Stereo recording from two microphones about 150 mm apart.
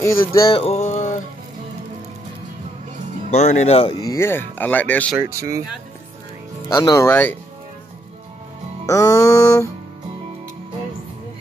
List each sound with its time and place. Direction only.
0.0 s music: 20° left (ahead or behind)
0.5 s a sound: 40° left (ahead or behind)
3.3 s speech: 50° left (ahead or behind)
3.9 s speech: 25° left (ahead or behind)
5.1 s speech: 15° right (ahead or behind)
6.7 s music: 20° left (ahead or behind)
7.1 s speech: 10° left (ahead or behind)
8.8 s music: 20° left (ahead or behind)